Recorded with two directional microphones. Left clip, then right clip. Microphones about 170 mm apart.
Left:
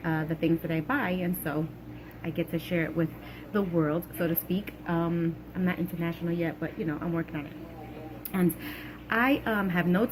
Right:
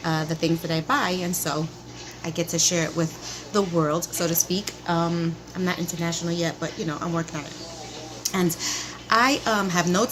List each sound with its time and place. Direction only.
0.1 s a woman's voice: 45° right (ahead or behind)
3.5 s a woman's voice: 25° right (ahead or behind)
4.4 s a woman's voice: 45° right (ahead or behind)